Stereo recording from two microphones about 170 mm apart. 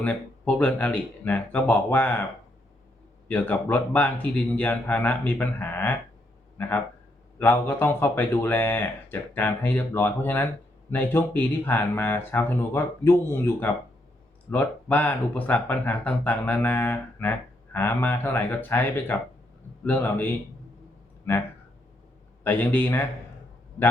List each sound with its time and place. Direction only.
0.0 s speech: 10° left (ahead or behind)
3.2 s speech: 10° left (ahead or behind)
22.4 s speech: 10° left (ahead or behind)